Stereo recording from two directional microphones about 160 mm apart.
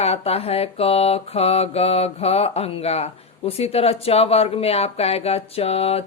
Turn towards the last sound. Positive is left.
turn(degrees=40)  # may be behind; listen again after turning